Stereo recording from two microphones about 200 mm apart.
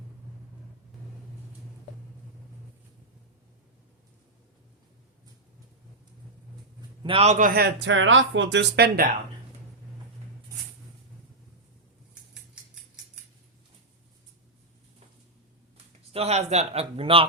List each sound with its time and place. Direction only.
7.0 s a man's voice: 30° right (ahead or behind); by 9.0 s 55° right (ahead or behind)
16.1 s speech: 30° right (ahead or behind)